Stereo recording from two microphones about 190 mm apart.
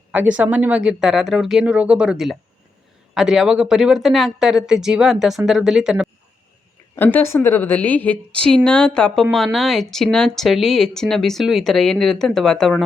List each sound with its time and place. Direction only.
0.1 s speech: 5° right (ahead or behind)
6.9 s a woman's voice: 10° left (ahead or behind)